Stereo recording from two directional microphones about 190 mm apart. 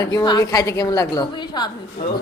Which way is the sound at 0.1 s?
20° left (ahead or behind).